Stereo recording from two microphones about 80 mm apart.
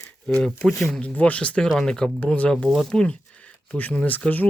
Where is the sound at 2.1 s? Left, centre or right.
Centre.